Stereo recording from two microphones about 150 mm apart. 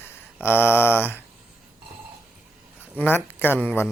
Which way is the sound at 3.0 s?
15° left (ahead or behind).